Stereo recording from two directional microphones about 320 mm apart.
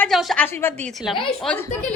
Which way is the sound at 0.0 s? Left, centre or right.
Centre.